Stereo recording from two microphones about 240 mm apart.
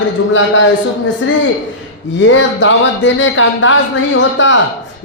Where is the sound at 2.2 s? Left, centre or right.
Left.